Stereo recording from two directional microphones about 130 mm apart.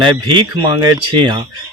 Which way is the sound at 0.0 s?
40° right (ahead or behind).